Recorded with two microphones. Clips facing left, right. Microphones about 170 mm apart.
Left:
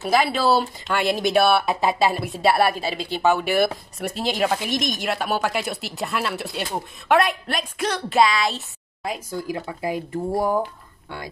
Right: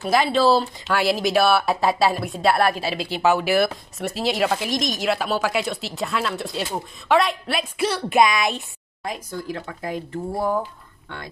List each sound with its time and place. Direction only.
0.0 s a woman's voice: centre (ahead or behind)
8.2 s a woman's voice: 20° right (ahead or behind)
9.0 s speech: 5° left (ahead or behind)